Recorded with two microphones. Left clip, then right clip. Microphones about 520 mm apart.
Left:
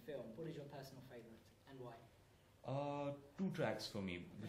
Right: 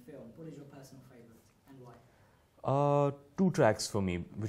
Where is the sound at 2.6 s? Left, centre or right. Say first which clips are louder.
Right 16 dB; right.